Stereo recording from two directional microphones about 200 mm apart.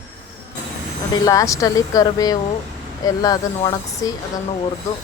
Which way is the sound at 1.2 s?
15° left (ahead or behind).